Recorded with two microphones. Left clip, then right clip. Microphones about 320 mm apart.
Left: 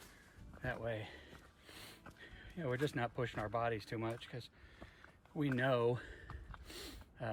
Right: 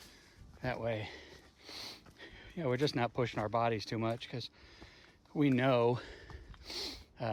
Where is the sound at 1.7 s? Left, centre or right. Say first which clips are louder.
Right 9 dB; centre.